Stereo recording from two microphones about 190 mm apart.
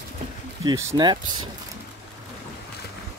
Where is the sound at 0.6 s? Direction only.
15° right (ahead or behind).